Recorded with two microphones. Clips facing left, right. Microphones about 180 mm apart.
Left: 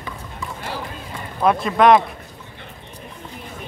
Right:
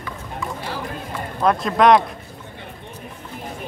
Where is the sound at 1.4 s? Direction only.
Centre (ahead or behind).